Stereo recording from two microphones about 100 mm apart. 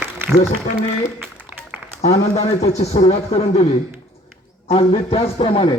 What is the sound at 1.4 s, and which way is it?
Applause, 15° right (ahead or behind).